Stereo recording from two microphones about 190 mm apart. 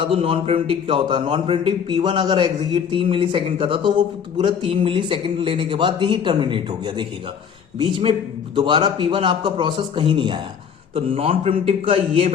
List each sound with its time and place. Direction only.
0.0 s a man's voice: 30° right (ahead or behind)